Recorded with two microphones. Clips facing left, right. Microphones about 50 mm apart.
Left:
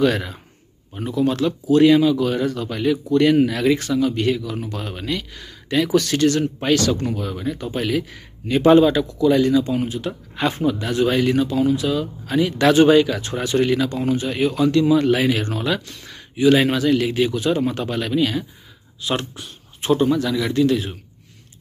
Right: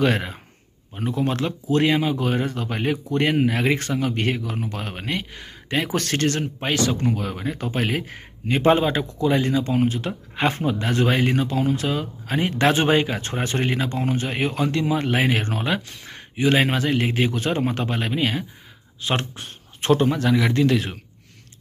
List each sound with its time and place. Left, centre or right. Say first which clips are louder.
0.0 s speech: left 2 dB; right
6.4 s speech: left 4 dB; right
7.2 s a man's voice: left 2 dB; right